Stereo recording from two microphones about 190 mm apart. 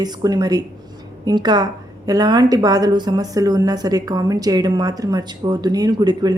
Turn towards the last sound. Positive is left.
turn(degrees=-20)  # may be behind; listen again after turning